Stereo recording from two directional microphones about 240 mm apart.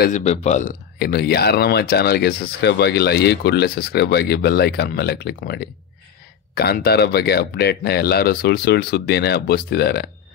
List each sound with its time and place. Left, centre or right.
0.0 s speech: left